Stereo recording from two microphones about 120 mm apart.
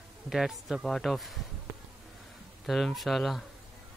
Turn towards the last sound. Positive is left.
turn(degrees=0)  # may be behind; listen again after turning